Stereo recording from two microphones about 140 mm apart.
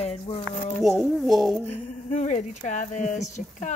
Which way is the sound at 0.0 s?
45° left (ahead or behind).